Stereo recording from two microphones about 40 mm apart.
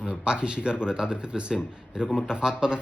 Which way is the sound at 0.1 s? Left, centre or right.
Right.